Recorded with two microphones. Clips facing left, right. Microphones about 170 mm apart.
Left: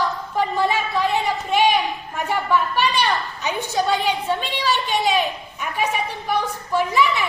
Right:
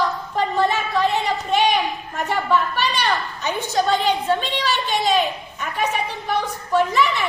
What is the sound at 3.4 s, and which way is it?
A woman's voice, 10° left (ahead or behind).